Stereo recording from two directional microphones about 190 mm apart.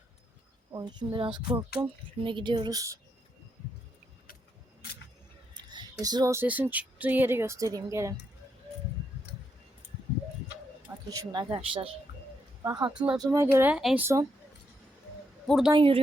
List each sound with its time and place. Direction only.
0.7 s speech: 25° right (ahead or behind)
5.5 s speech: 20° right (ahead or behind)
10.8 s speech: 15° right (ahead or behind)
12.9 s speech: 5° right (ahead or behind)
13.1 s speech: 20° right (ahead or behind)
15.4 s a woman's voice: centre (ahead or behind)
15.7 s speech: 30° right (ahead or behind)